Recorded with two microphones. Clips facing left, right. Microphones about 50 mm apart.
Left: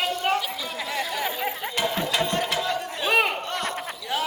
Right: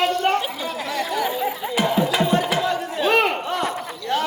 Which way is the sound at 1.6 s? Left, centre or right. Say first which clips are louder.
Right 7 dB; centre.